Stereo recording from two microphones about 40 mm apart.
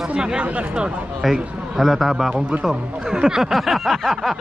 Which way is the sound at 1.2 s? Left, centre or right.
Centre.